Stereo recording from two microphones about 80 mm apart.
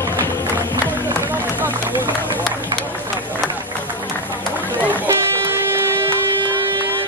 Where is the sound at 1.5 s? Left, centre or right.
Right.